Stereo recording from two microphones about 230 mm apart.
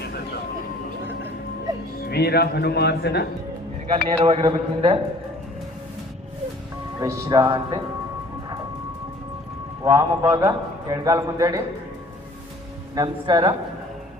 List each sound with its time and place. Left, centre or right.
2.0 s speech: left
3.9 s a man's voice: right
7.0 s a man's voice: centre
9.8 s a man's voice: centre
13.0 s a man's voice: centre